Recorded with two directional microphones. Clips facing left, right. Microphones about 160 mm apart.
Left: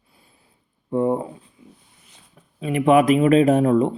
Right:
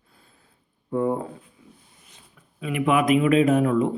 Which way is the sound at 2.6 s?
35° left (ahead or behind).